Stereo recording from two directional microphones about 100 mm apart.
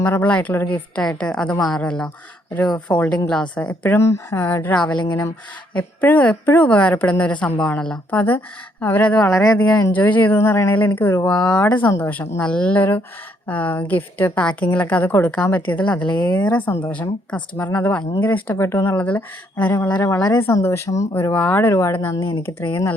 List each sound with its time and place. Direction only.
0.0 s a woman's voice: 15° left (ahead or behind)
3.8 s a woman's voice: 25° left (ahead or behind)
12.4 s a woman's voice: 10° left (ahead or behind)
18.5 s speech: 30° left (ahead or behind)
18.9 s a woman's voice: 15° left (ahead or behind)
20.0 s speech: 35° left (ahead or behind)
20.5 s speech: 30° left (ahead or behind)
21.7 s speech: 30° left (ahead or behind)